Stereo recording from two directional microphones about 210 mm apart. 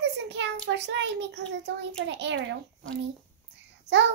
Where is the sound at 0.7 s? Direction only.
60° right (ahead or behind).